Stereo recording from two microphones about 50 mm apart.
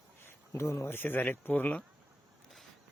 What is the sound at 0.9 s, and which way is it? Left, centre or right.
Speech, left.